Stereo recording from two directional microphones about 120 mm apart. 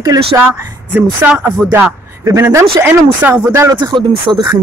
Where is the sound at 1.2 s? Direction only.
15° right (ahead or behind).